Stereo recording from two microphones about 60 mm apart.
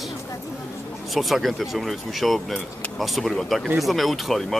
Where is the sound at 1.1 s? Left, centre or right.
Centre.